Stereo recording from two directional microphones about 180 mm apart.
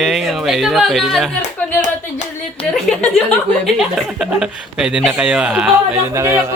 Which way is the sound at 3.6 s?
Centre (ahead or behind).